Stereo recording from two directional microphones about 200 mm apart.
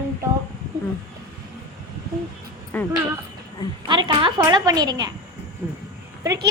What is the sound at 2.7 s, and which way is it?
Speech, 10° left (ahead or behind).